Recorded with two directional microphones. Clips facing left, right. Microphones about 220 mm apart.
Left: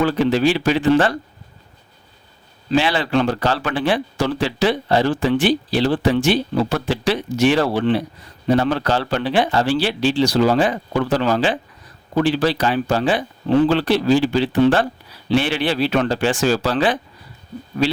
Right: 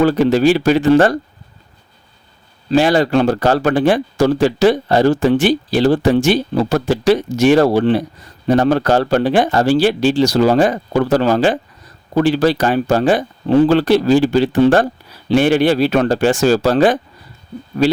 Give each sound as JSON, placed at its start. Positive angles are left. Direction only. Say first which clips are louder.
{"t": 0.0, "sound": "speech", "louder": "right 5 dB", "side_deg": -45}
{"t": 2.6, "sound": "speech", "louder": "right 6 dB", "side_deg": -45}